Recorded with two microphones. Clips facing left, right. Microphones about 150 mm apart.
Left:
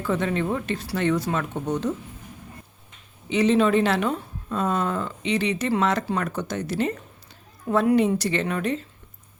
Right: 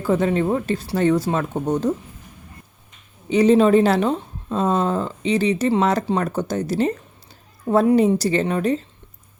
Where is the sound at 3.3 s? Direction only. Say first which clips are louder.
Right 5 dB; 40° right (ahead or behind).